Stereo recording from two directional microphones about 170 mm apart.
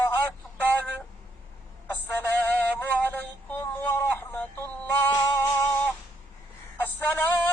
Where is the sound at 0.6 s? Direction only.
10° left (ahead or behind).